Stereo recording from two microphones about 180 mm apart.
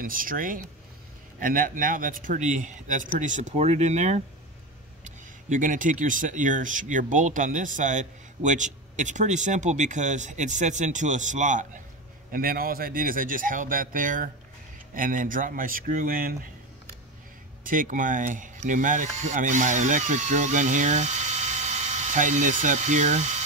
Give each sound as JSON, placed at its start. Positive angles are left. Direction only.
{"t": 0.0, "sound": "speech", "side_deg": -50}
{"t": 12.3, "sound": "speech", "side_deg": -55}
{"t": 17.6, "sound": "speech", "side_deg": -50}